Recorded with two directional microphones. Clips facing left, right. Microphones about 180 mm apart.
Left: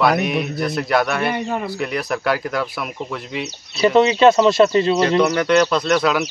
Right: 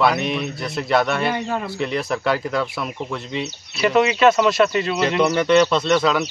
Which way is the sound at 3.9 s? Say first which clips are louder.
Left 3 dB; 30° left (ahead or behind).